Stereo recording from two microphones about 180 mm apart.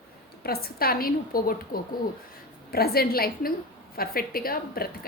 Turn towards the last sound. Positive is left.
turn(degrees=55)  # may be behind; listen again after turning